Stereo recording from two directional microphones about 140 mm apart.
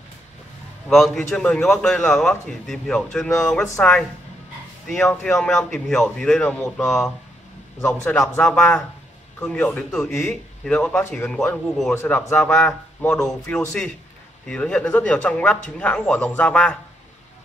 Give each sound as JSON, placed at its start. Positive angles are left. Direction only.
{"t": 0.8, "sound": "speech", "side_deg": 0}
{"t": 4.8, "sound": "speech", "side_deg": 0}
{"t": 7.8, "sound": "speech", "side_deg": 20}
{"t": 10.1, "sound": "speech", "side_deg": 0}
{"t": 11.9, "sound": "speech", "side_deg": 20}